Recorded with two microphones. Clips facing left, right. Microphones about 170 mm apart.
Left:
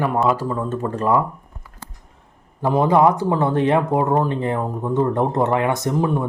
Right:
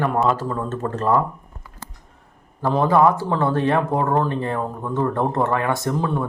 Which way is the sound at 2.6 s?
15° left (ahead or behind).